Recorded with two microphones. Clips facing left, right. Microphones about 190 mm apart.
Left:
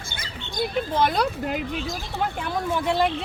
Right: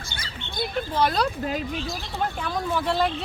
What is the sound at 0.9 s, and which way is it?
Speech, 20° left (ahead or behind).